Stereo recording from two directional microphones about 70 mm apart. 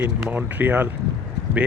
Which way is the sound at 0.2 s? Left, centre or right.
Right.